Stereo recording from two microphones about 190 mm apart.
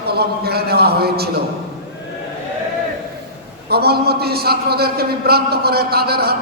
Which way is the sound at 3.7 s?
55° right (ahead or behind).